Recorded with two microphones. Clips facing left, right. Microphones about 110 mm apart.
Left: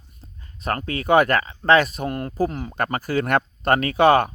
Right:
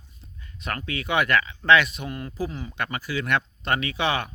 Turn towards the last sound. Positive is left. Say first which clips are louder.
# left 10 dB
turn(degrees=45)  # may be behind; listen again after turning